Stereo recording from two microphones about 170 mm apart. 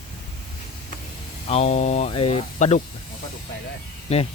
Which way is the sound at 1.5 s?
40° left (ahead or behind).